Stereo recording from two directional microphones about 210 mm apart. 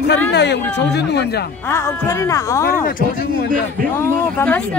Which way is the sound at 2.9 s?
45° left (ahead or behind).